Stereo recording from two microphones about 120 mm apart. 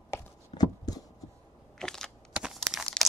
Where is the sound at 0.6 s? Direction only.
35° left (ahead or behind).